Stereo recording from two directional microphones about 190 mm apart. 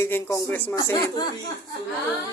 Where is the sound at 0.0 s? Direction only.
15° left (ahead or behind).